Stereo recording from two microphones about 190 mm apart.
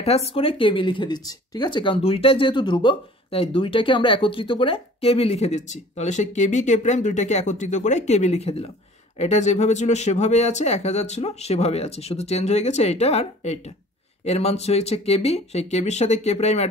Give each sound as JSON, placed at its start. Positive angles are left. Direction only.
{"t": 0.0, "sound": "speech", "side_deg": 30}